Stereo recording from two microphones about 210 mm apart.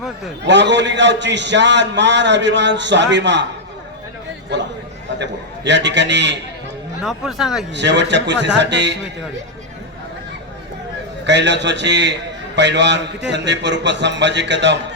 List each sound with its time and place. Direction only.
0.4 s a man's voice: 55° right (ahead or behind)
5.2 s a man's voice: 55° right (ahead or behind)
7.0 s speech: centre (ahead or behind)
7.7 s a man's voice: 55° right (ahead or behind)
11.3 s a man's voice: 55° right (ahead or behind)